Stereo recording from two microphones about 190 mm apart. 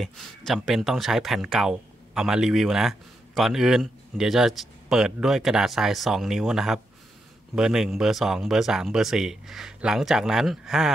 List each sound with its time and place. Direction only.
0.5 s speech: centre (ahead or behind)